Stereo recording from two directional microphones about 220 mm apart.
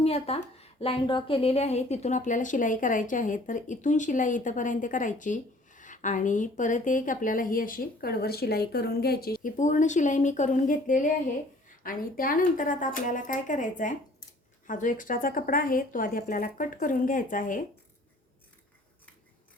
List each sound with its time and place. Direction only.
0.0 s speech: 25° left (ahead or behind)